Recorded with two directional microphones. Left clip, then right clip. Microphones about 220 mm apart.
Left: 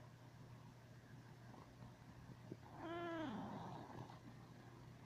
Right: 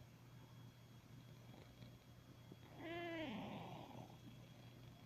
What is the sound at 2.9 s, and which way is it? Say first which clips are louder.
Cat: left 1 dB; 40° right (ahead or behind).